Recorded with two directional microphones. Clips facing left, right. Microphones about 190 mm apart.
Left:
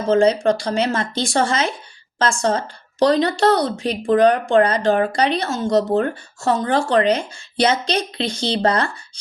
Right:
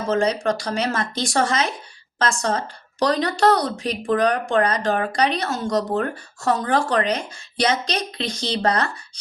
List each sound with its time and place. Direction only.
0.1 s a woman's voice: 30° left (ahead or behind)